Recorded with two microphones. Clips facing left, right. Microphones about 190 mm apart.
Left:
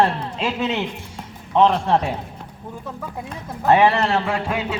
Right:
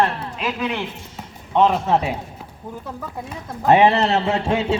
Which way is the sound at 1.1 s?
5° right (ahead or behind).